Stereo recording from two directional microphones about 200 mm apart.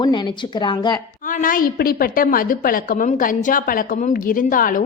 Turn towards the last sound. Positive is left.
turn(degrees=45)  # may be behind; listen again after turning